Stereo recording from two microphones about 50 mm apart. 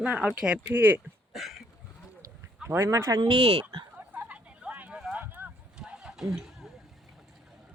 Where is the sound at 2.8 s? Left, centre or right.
Right.